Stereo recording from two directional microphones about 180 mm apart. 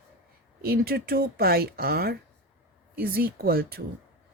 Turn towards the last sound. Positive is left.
turn(degrees=-55)  # may be behind; listen again after turning